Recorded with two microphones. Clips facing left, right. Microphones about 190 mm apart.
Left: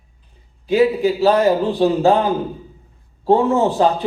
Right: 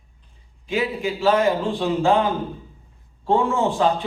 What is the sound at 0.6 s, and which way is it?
A man's voice, 40° left (ahead or behind).